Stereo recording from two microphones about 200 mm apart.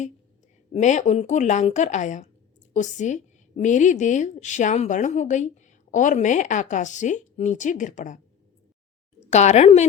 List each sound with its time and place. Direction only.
0.7 s a woman's voice: 35° left (ahead or behind)
9.3 s a woman's voice: 35° left (ahead or behind)